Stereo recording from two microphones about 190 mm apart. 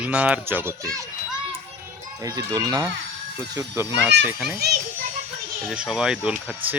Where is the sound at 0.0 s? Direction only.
5° right (ahead or behind).